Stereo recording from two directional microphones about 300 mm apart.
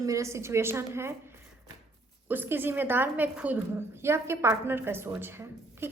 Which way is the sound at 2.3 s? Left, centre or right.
Centre.